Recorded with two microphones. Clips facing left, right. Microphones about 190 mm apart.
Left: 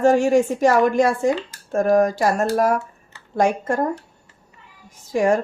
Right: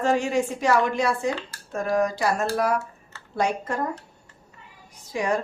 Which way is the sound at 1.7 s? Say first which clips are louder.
Left 7 dB; 45° left (ahead or behind).